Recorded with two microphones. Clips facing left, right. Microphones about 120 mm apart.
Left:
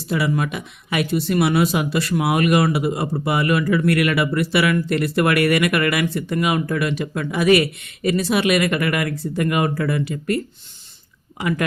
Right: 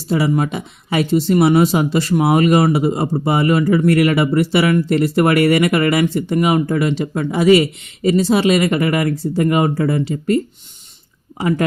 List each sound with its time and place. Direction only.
0.1 s speech: 30° right (ahead or behind)